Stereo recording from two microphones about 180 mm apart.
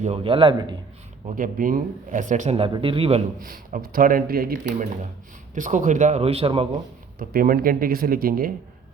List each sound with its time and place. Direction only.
0.0 s a man's voice: 35° right (ahead or behind)
1.4 s speech: 50° right (ahead or behind); by 3.2 s 35° right (ahead or behind)
3.4 s speech: 50° right (ahead or behind)
5.5 s speech: 45° right (ahead or behind)
7.2 s speech: 55° right (ahead or behind)